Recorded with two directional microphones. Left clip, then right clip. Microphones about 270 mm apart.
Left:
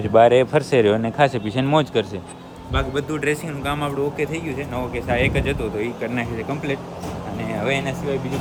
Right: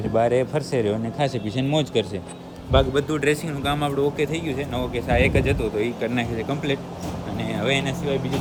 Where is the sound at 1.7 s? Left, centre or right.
Centre.